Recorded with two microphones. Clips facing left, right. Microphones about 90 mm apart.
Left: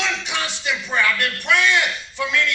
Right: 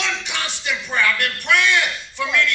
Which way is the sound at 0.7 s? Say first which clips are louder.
Even; 15° left (ahead or behind).